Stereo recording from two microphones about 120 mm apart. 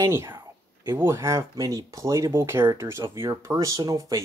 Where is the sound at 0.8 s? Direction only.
20° right (ahead or behind).